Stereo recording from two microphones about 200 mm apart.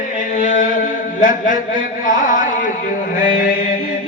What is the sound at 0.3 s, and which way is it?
Mantra, 40° left (ahead or behind).